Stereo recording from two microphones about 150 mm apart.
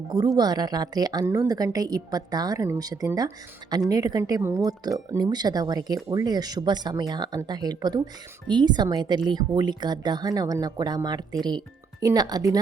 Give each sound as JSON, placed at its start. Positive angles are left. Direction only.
{"t": 0.1, "sound": "a woman's voice", "side_deg": -25}